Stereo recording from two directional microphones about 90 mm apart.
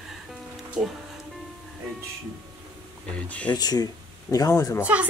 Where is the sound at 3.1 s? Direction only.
15° left (ahead or behind).